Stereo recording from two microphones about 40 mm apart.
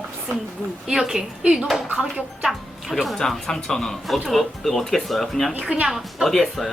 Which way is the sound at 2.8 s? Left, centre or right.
Centre.